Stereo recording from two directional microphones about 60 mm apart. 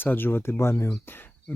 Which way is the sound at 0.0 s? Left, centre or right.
Left.